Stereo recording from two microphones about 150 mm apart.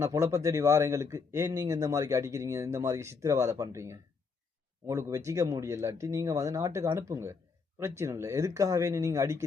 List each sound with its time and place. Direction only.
0.0 s speech: 20° right (ahead or behind)